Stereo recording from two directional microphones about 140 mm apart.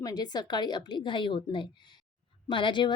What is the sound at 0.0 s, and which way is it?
A woman's voice, 30° left (ahead or behind).